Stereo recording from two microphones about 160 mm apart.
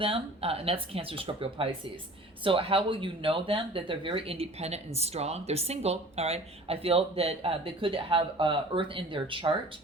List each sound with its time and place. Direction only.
0.0 s speech: 35° right (ahead or behind)